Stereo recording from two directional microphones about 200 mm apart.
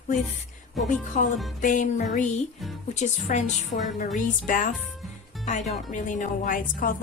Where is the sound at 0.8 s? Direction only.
40° left (ahead or behind).